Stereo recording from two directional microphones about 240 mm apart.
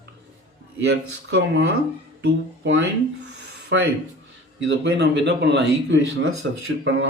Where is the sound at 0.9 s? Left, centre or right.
Right.